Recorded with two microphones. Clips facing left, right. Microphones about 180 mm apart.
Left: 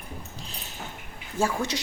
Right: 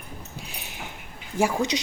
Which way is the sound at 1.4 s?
15° right (ahead or behind).